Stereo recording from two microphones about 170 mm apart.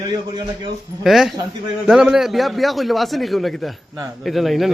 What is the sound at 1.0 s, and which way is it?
A man's voice, centre (ahead or behind).